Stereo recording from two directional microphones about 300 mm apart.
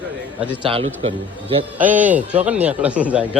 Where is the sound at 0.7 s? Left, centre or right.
Centre.